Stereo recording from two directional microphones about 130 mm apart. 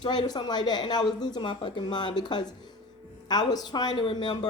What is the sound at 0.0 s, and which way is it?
Speech, 35° left (ahead or behind).